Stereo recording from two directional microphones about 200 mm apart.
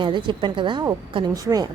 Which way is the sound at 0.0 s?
25° right (ahead or behind).